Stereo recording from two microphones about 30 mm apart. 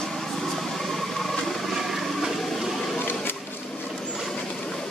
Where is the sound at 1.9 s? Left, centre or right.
Centre.